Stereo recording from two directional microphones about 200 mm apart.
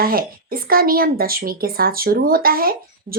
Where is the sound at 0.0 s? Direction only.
45° right (ahead or behind).